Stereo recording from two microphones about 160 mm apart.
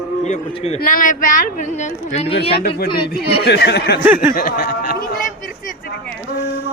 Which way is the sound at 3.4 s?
90° left.